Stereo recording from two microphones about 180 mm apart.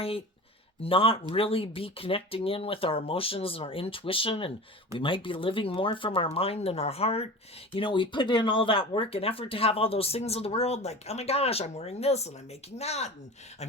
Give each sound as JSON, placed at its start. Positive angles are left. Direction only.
{"t": 0.8, "sound": "speech", "side_deg": 30}